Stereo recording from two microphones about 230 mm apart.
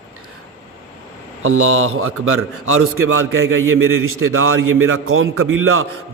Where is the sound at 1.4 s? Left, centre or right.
Right.